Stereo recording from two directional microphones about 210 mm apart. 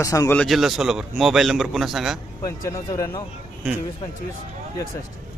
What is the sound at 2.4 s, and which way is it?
Speech, 15° left (ahead or behind).